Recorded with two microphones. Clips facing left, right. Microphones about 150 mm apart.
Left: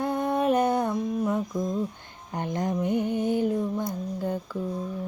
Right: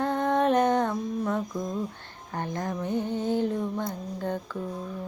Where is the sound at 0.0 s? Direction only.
10° left (ahead or behind).